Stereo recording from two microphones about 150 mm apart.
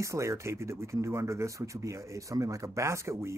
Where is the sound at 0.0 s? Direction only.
20° right (ahead or behind).